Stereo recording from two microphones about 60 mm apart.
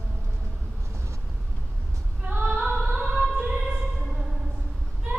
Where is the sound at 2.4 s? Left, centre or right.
Centre.